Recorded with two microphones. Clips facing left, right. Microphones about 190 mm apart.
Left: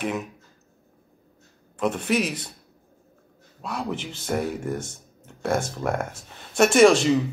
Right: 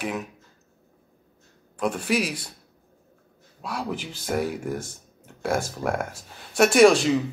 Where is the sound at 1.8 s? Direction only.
5° right (ahead or behind).